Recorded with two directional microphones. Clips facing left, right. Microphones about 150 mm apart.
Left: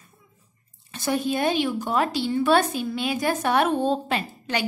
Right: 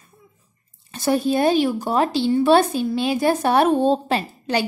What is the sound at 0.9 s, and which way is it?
Speech, 40° right (ahead or behind).